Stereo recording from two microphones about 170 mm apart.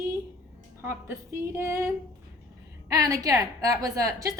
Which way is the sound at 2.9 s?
20° right (ahead or behind).